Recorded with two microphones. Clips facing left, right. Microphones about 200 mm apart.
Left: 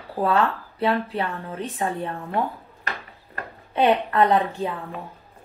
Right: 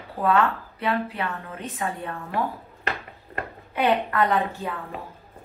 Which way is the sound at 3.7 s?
30° left (ahead or behind).